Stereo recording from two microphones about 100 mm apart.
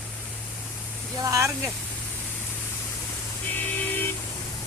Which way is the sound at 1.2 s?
30° right (ahead or behind).